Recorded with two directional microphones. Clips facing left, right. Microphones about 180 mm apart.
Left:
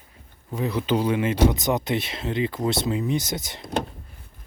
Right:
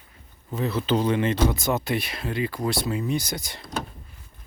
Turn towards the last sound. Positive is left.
turn(degrees=20)  # may be behind; listen again after turning